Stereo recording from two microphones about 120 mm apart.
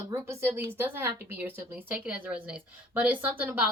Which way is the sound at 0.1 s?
20° right (ahead or behind).